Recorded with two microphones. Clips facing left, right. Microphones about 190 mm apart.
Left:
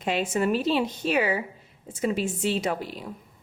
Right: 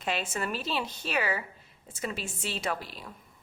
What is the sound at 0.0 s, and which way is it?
A woman's voice, 10° left (ahead or behind).